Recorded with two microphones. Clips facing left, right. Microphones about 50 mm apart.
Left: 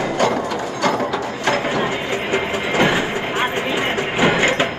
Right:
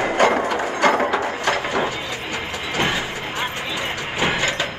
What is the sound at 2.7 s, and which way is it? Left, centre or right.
Train, left.